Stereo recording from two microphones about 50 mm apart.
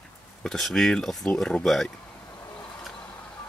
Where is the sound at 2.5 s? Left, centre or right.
Centre.